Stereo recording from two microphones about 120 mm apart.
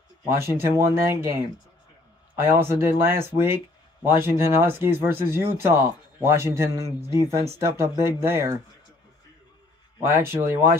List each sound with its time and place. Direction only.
0.4 s speech: 20° right (ahead or behind)
2.4 s speech: 20° right (ahead or behind)
9.9 s speech: 20° right (ahead or behind)